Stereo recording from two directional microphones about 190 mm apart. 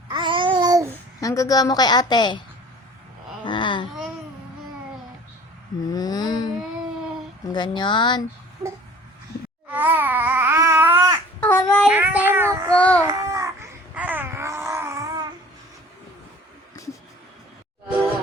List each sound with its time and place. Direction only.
0.1 s babbling: 25° right (ahead or behind)
1.2 s a woman's voice: 15° left (ahead or behind)
3.4 s a sound: 25° left (ahead or behind)
5.9 s a woman's voice: 20° left (ahead or behind)
7.5 s a woman's voice: 25° left (ahead or behind)
9.6 s babbling: 10° right (ahead or behind)
11.3 s babbling: 10° left (ahead or behind)
11.9 s speech: 10° right (ahead or behind)
12.7 s speech: 5° left (ahead or behind)
13.0 s baby cry: 15° right (ahead or behind)